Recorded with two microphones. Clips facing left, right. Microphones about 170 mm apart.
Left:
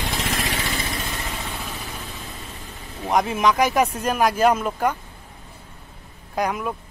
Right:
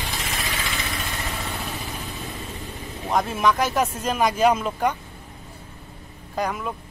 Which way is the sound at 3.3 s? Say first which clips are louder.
Left 2 dB; 15° left (ahead or behind).